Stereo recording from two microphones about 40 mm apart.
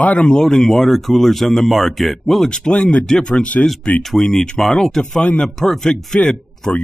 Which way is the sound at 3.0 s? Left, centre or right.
Centre.